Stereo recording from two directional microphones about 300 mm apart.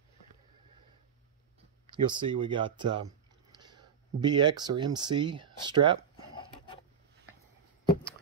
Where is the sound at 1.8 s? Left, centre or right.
Centre.